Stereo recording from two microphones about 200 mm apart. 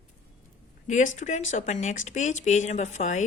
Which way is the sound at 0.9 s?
35° left (ahead or behind).